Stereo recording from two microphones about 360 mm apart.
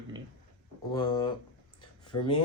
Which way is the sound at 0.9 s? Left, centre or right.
Centre.